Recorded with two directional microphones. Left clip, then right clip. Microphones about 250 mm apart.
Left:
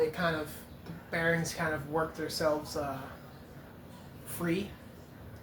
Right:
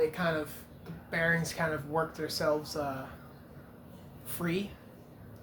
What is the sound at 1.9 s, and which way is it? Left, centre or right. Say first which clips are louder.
Speech: even; right.